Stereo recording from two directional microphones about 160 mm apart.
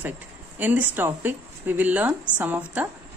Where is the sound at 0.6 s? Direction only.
10° right (ahead or behind).